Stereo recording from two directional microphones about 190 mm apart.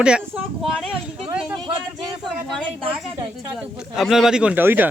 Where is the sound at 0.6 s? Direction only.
Centre (ahead or behind).